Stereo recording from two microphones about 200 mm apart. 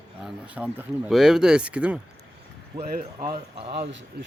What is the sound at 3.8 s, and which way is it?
Speech, 65° right (ahead or behind).